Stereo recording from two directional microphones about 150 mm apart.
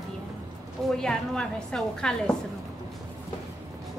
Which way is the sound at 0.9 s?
5° left (ahead or behind).